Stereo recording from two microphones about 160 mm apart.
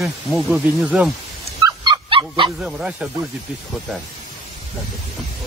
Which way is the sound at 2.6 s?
5° right (ahead or behind).